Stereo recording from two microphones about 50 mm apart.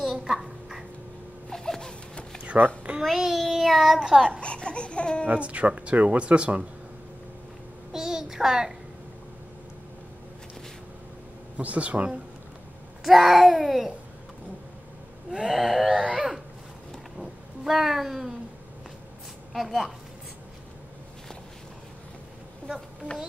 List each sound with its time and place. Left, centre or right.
0.0 s a sound: centre
1.5 s a sound: centre
2.4 s a sound: right
3.0 s a child's voice: centre
4.4 s baby cry: left
5.4 s speech: right
7.9 s child singing: centre
11.5 s speech: right
13.0 s a child's voice: centre
15.4 s a child's voice: centre
16.0 s a sound: centre
17.2 s speech: centre
19.5 s a child's voice: centre